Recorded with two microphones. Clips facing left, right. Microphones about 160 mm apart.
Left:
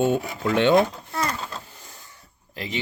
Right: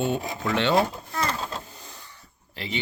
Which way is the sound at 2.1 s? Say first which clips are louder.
Left 2 dB; 40° left (ahead or behind).